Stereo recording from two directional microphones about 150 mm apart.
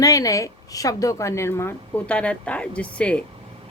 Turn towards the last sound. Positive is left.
turn(degrees=10)  # may be behind; listen again after turning